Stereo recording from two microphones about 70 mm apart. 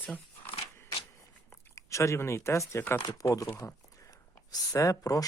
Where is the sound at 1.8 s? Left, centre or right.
Left.